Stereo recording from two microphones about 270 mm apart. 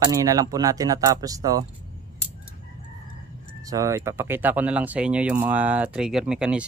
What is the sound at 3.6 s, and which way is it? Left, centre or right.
Speech, centre.